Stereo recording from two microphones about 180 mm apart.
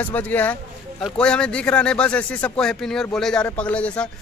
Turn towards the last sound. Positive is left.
turn(degrees=5)  # may be behind; listen again after turning